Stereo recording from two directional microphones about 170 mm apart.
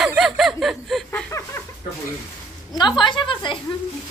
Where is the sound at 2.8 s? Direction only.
25° left (ahead or behind).